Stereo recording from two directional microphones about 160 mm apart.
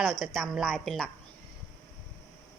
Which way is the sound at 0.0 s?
Centre (ahead or behind).